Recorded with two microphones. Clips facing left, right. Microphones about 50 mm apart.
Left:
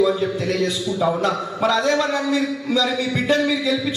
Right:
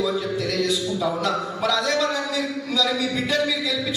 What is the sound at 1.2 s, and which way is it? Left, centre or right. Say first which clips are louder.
A man's voice: left 3 dB; left.